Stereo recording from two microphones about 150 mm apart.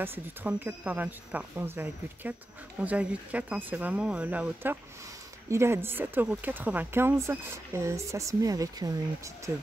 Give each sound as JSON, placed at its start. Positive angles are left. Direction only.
{"t": 0.0, "sound": "speech", "side_deg": -15}